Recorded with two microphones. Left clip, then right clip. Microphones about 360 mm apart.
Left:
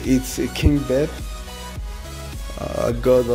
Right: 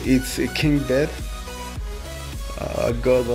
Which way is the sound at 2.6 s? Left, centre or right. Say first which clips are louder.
Left 1 dB; centre.